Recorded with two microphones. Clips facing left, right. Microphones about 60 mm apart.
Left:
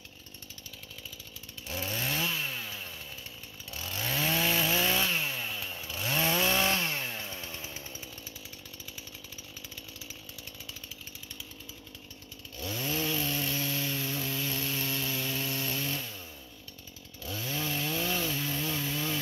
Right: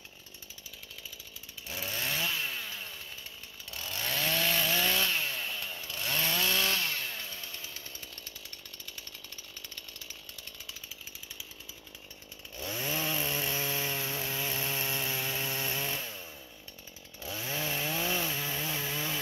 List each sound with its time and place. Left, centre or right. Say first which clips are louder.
1.7 s chainsaw: left 2 dB; centre
6.2 s chainsaw: left 4 dB; left
12.5 s chainsaw: left 1 dB; centre
17.2 s chainsaw: left 1 dB; centre